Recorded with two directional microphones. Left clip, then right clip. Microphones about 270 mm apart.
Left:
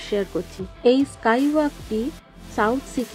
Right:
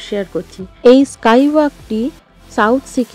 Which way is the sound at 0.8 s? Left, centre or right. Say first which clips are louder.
Right 9 dB; right.